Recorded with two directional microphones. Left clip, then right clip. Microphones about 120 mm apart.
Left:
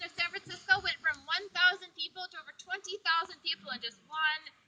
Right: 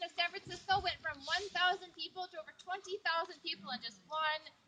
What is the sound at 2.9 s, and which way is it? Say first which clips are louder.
A woman's voice: left 6 dB; 30° left (ahead or behind).